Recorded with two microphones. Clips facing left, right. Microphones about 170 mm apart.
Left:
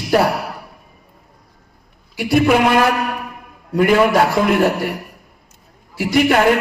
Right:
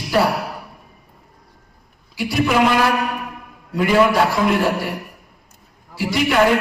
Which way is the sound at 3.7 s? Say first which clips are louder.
Left 2 dB; 55° left (ahead or behind).